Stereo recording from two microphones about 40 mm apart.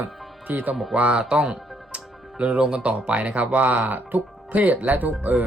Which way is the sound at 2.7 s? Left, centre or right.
Right.